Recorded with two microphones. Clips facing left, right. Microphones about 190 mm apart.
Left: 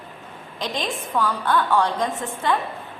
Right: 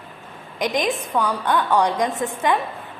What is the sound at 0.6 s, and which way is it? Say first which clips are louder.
A woman's voice: right 6 dB; 15° right (ahead or behind).